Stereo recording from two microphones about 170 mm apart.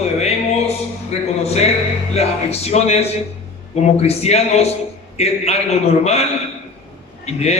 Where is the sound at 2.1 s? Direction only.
40° left (ahead or behind).